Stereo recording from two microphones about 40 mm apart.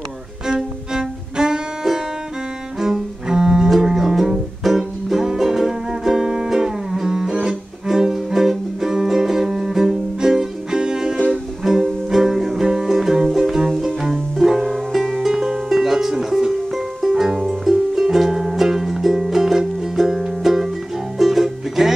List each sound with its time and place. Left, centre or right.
1.3 s music: centre
15.2 s music: centre